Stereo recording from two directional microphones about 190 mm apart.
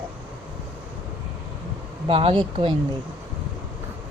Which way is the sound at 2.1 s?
30° right (ahead or behind).